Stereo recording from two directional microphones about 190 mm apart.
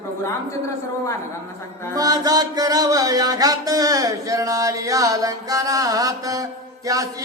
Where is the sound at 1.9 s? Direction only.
20° right (ahead or behind).